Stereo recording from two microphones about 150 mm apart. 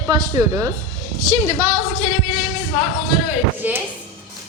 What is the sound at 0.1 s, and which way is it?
Speech, 25° right (ahead or behind).